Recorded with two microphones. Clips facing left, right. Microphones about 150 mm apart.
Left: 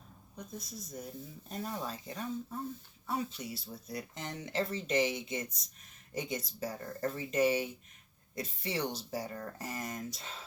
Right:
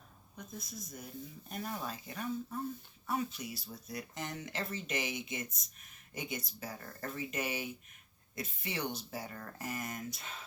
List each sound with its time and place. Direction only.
0.3 s speech: 35° left (ahead or behind)